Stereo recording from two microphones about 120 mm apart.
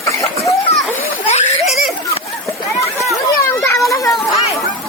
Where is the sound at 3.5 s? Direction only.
25° left (ahead or behind).